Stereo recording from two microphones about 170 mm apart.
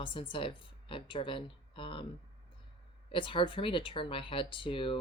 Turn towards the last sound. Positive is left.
turn(degrees=30)  # may be behind; listen again after turning